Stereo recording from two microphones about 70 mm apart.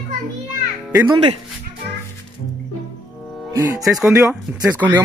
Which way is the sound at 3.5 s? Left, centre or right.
Right.